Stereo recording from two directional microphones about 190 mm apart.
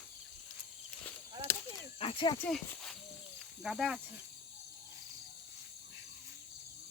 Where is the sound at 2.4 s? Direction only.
Centre (ahead or behind).